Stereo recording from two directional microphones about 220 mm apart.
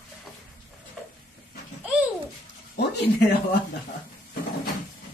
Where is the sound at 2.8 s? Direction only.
50° left (ahead or behind).